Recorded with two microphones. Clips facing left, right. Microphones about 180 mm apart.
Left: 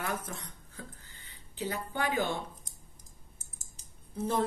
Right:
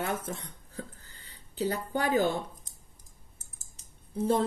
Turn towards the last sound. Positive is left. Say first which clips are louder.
# right 4 dB
turn(degrees=-30)  # may be behind; listen again after turning